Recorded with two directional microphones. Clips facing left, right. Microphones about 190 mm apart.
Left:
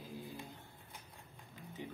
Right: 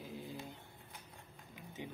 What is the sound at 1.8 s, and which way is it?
Speech, 20° right (ahead or behind).